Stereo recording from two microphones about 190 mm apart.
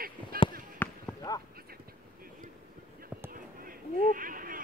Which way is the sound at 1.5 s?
50° right (ahead or behind).